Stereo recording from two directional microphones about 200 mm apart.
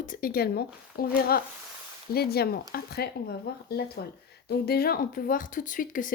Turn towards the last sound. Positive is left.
turn(degrees=40)  # may be behind; listen again after turning